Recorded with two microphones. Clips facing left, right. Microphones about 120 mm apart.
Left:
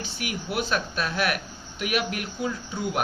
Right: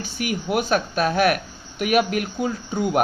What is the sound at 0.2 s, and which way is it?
Speech, 45° right (ahead or behind).